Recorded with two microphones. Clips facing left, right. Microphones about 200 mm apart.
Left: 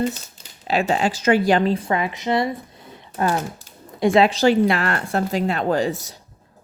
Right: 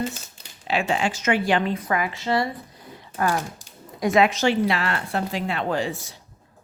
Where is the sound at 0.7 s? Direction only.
40° left (ahead or behind).